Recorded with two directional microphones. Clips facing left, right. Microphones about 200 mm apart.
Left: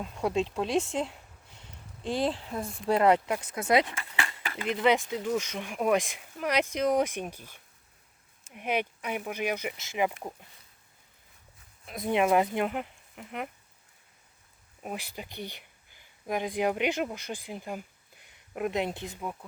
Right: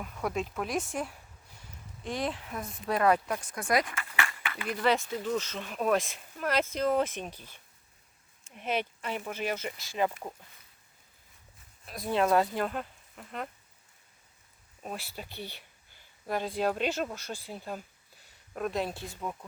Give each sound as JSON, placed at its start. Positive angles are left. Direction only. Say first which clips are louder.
{"t": 0.0, "sound": "speech", "louder": "left 4 dB", "side_deg": 25}
{"t": 11.9, "sound": "speech", "louder": "left 2 dB", "side_deg": 20}
{"t": 14.8, "sound": "speech", "louder": "left 2 dB", "side_deg": 15}